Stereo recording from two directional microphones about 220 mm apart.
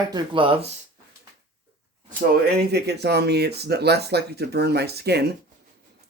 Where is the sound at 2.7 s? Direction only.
50° right (ahead or behind).